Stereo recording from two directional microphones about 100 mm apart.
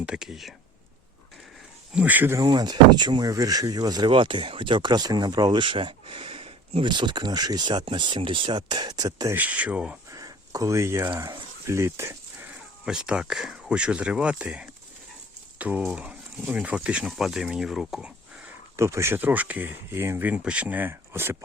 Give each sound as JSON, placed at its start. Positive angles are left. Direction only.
{"t": 0.0, "sound": "speech", "side_deg": -10}
{"t": 1.9, "sound": "speech", "side_deg": -15}
{"t": 2.4, "sound": "speech", "side_deg": -45}
{"t": 4.1, "sound": "speech", "side_deg": -60}
{"t": 6.9, "sound": "speech", "side_deg": -50}
{"t": 9.3, "sound": "speech", "side_deg": -15}
{"t": 10.1, "sound": "a sound", "side_deg": -35}
{"t": 11.2, "sound": "speech", "side_deg": -30}
{"t": 12.5, "sound": "speech", "side_deg": -10}
{"t": 15.5, "sound": "a sound", "side_deg": -15}
{"t": 15.9, "sound": "speech", "side_deg": -10}
{"t": 18.8, "sound": "speech", "side_deg": -30}